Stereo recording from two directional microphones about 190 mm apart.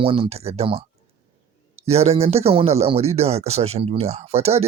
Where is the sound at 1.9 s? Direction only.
35° right (ahead or behind).